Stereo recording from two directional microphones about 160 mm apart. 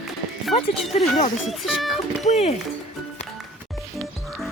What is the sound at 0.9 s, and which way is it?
Speech, 40° left (ahead or behind).